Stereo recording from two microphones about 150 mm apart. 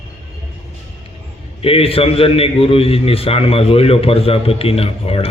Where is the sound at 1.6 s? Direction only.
40° left (ahead or behind).